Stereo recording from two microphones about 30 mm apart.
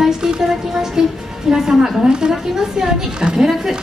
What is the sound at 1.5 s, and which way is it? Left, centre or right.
A woman's voice, right.